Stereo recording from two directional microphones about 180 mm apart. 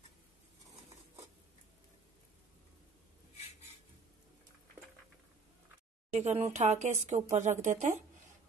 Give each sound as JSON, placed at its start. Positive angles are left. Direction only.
{"t": 6.1, "sound": "speech", "side_deg": -35}